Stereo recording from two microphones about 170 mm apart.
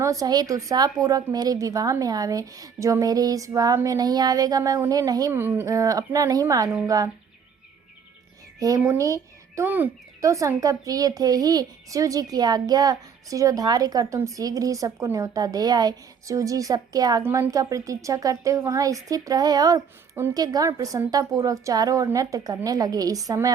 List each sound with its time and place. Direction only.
0.0 s speech: 20° right (ahead or behind)
8.5 s speech: 20° right (ahead or behind)